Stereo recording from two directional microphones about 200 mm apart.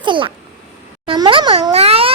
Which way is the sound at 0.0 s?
25° right (ahead or behind).